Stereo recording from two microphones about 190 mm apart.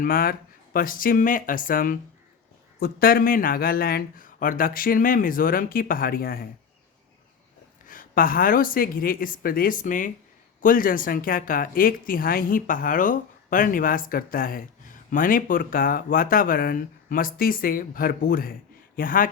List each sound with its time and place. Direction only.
0.0 s speech: 50° left (ahead or behind)
7.9 s speech: 45° left (ahead or behind)